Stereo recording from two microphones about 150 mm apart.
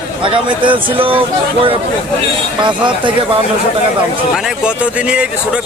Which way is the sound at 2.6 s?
30° right (ahead or behind).